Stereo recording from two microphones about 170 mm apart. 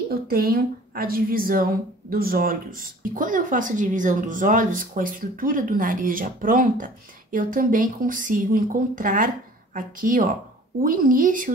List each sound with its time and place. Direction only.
0.1 s a woman's voice: 60° right (ahead or behind)